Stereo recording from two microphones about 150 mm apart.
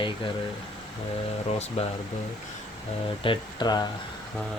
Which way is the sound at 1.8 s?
40° left (ahead or behind).